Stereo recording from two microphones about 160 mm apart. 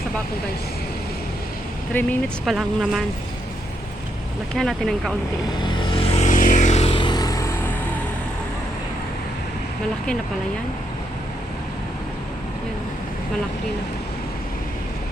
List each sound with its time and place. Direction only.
1.9 s speech: 10° left (ahead or behind)
4.5 s speech: centre (ahead or behind)
5.6 s music: 30° left (ahead or behind)